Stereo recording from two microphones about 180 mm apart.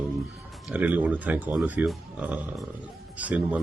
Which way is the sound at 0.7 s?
10° right (ahead or behind).